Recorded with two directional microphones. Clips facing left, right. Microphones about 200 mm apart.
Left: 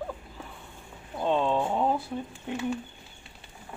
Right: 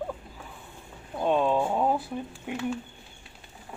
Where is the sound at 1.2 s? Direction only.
10° right (ahead or behind).